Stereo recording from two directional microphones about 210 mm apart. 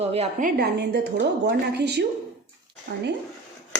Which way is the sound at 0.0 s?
30° right (ahead or behind).